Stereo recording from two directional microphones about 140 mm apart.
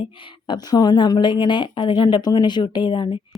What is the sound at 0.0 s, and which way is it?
Speech, 35° left (ahead or behind).